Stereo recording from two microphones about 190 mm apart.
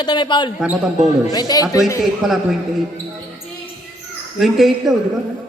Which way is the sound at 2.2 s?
Centre (ahead or behind).